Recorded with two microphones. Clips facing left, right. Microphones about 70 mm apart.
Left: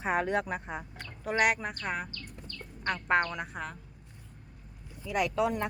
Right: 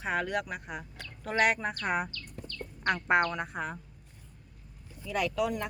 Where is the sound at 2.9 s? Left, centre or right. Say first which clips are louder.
Right 2 dB; centre.